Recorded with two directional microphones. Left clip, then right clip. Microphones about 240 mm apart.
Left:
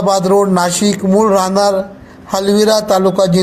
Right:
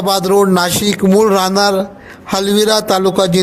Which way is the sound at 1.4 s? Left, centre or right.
Right.